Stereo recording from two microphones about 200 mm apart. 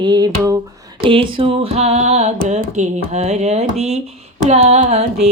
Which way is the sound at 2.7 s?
35° right (ahead or behind).